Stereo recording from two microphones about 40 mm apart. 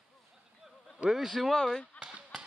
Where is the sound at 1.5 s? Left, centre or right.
Centre.